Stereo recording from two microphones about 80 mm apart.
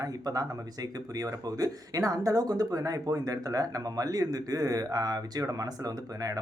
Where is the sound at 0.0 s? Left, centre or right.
Right.